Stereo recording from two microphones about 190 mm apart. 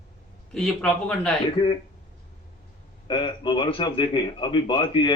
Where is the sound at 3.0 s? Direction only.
25° left (ahead or behind).